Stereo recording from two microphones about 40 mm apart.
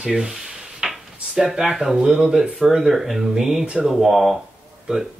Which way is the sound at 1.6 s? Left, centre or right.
Centre.